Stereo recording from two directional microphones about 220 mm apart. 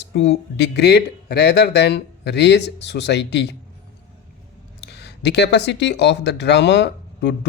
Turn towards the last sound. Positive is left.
turn(degrees=50)  # may be behind; listen again after turning